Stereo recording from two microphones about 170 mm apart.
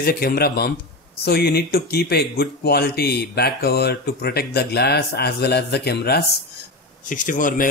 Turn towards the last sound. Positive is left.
turn(degrees=50)  # may be behind; listen again after turning